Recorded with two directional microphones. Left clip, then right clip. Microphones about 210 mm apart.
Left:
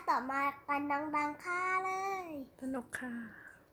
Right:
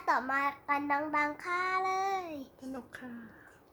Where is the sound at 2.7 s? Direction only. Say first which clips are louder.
Left 5 dB; 30° left (ahead or behind).